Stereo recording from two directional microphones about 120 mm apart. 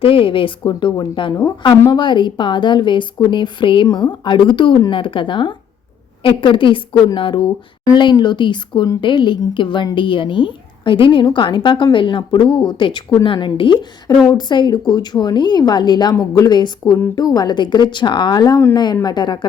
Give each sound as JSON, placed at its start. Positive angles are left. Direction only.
{"t": 0.0, "sound": "a woman's voice", "side_deg": 45}